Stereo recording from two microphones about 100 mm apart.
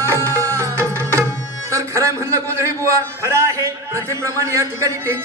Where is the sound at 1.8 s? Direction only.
30° right (ahead or behind).